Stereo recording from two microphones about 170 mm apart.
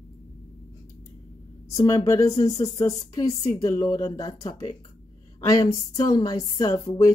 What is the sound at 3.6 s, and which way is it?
A woman's voice, 20° left (ahead or behind).